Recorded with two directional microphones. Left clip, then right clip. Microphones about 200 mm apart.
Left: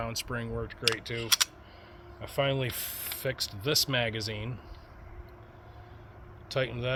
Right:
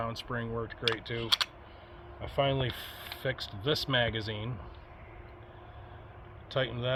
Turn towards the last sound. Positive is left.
turn(degrees=30)  # may be behind; listen again after turning